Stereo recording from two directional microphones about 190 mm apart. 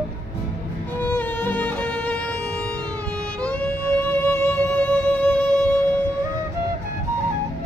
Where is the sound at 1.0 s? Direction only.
10° left (ahead or behind).